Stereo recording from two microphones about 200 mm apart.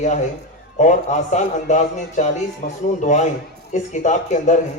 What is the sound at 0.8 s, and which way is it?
A man's voice, 35° left (ahead or behind).